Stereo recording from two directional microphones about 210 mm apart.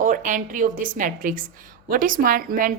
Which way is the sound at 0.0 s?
40° right (ahead or behind).